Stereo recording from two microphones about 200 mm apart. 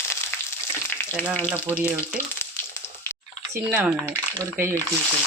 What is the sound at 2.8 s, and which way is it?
Water, 10° left (ahead or behind).